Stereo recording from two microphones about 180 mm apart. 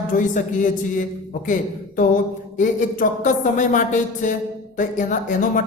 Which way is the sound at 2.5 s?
45° left (ahead or behind).